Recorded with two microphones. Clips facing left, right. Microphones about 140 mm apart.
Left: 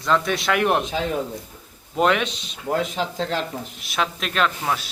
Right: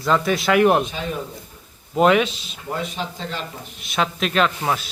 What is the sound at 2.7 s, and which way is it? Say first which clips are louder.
Speech: left 4 dB; 90° left.